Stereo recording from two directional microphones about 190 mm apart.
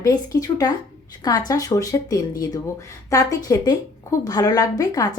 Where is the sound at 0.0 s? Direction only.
20° left (ahead or behind).